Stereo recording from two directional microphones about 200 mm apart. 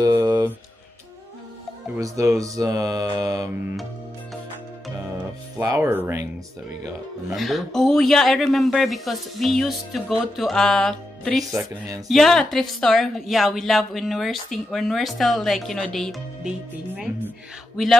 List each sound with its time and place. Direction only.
0.0 s mantra: 20° right (ahead or behind)
2.0 s speech: 15° right (ahead or behind)
5.6 s speech: 10° right (ahead or behind)
7.3 s speech: centre (ahead or behind)
11.5 s speech: 15° right (ahead or behind)
12.1 s speech: centre (ahead or behind)